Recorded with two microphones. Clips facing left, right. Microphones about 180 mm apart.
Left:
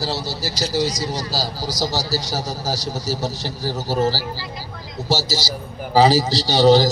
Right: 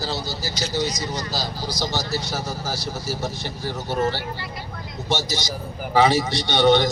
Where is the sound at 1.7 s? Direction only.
40° left (ahead or behind).